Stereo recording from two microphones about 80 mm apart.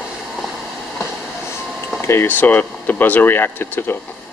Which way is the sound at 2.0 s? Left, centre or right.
Left.